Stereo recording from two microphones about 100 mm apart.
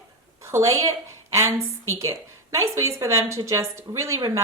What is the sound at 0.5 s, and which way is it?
A woman's voice, 35° right (ahead or behind).